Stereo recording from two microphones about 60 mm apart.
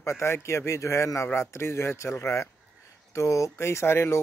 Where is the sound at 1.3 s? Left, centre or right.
Left.